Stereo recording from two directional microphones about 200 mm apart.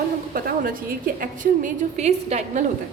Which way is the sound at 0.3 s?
45° right (ahead or behind).